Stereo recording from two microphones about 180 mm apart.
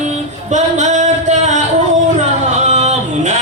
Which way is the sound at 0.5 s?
40° right (ahead or behind).